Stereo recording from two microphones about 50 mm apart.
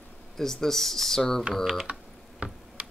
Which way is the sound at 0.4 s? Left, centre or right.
Centre.